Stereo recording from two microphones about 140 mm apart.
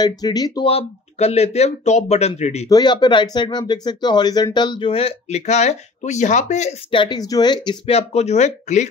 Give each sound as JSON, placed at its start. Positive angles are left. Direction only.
{"t": 0.0, "sound": "speech", "side_deg": 30}
{"t": 0.7, "sound": "speech", "side_deg": 45}
{"t": 2.7, "sound": "speech", "side_deg": 30}
{"t": 6.9, "sound": "speech", "side_deg": 35}
{"t": 7.8, "sound": "speech", "side_deg": 50}